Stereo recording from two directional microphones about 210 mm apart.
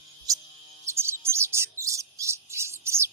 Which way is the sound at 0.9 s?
10° right (ahead or behind).